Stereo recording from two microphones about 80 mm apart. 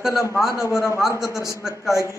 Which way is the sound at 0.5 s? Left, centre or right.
Left.